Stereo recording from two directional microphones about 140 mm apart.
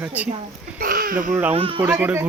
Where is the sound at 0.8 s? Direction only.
90° right.